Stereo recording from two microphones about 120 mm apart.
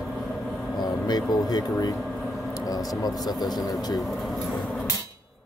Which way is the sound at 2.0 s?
Centre (ahead or behind).